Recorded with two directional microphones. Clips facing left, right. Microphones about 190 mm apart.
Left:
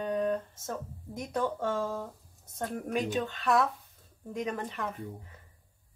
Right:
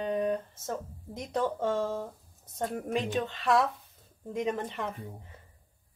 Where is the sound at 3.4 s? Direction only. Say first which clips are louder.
Right 1 dB; 20° right (ahead or behind).